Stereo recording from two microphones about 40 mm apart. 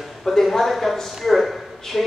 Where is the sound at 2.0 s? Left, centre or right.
Centre.